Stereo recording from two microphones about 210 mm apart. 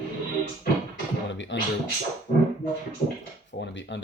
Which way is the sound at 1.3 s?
60° left (ahead or behind).